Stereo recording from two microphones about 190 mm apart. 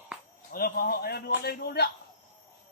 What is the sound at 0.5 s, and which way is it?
A man's voice, 50° left (ahead or behind).